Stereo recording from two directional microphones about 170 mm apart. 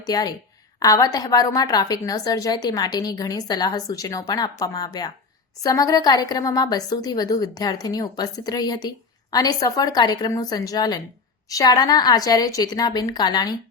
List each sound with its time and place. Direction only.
0.0 s a woman's voice: 25° left (ahead or behind)